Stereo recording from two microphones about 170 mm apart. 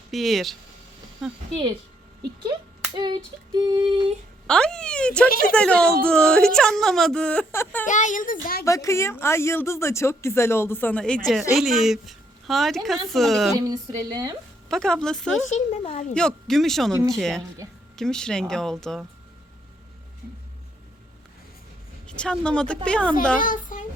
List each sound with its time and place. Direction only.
0.1 s a woman's voice: centre (ahead or behind)
2.9 s female singing: 25° right (ahead or behind)
4.4 s a woman's voice: 5° left (ahead or behind)
7.9 s a child's voice: 45° left (ahead or behind)
8.6 s a woman's voice: 20° left (ahead or behind); by 13.5 s centre (ahead or behind)
13.5 s female singing: 20° right (ahead or behind)
14.7 s a woman's voice: 5° left (ahead or behind)
15.4 s speech: 35° left (ahead or behind)
16.1 s a woman's voice: 5° left (ahead or behind)
16.9 s speech: 15° right (ahead or behind)
17.2 s a woman's voice: 5° left (ahead or behind)
22.0 s speech: 5° left (ahead or behind)
23.4 s a sound: 50° left (ahead or behind)